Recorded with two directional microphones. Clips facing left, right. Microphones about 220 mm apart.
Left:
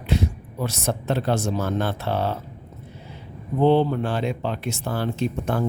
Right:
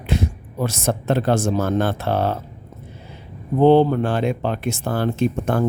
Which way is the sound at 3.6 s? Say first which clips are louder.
Right 5 dB; 50° right (ahead or behind).